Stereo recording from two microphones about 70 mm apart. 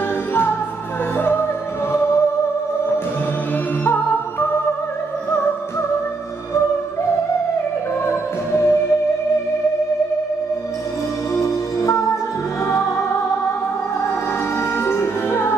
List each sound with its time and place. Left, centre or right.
0.3 s music: left
3.8 s music: left
8.1 s music: left
11.3 s music: left
14.8 s music: left